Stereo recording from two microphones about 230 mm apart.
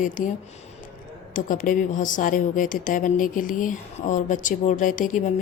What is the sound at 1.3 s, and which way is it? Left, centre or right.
Speech, left.